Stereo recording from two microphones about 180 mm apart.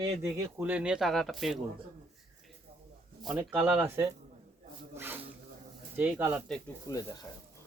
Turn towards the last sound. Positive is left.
turn(degrees=20)  # may be behind; listen again after turning